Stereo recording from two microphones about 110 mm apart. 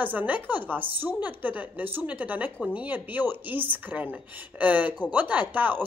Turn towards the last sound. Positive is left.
turn(degrees=-15)  # may be behind; listen again after turning